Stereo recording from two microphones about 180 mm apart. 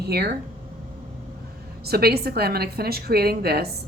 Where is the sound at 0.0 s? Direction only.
60° right (ahead or behind).